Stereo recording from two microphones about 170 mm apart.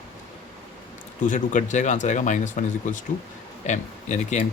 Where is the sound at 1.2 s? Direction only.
50° left (ahead or behind).